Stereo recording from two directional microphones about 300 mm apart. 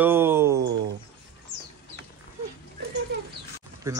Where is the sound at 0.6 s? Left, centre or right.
Right.